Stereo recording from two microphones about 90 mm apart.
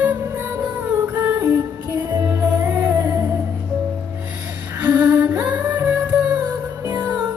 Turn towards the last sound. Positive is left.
turn(degrees=-25)  # may be behind; listen again after turning